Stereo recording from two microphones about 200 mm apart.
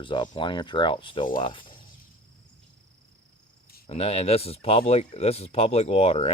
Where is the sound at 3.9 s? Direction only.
30° left (ahead or behind).